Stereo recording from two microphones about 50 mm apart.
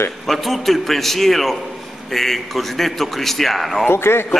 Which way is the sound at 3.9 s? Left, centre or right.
Left.